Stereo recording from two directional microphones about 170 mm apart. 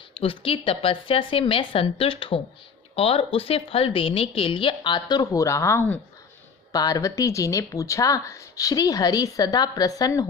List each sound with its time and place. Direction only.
0.1 s a woman's voice: 30° left (ahead or behind)